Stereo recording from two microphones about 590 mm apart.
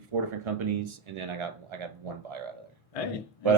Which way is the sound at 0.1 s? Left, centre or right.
Right.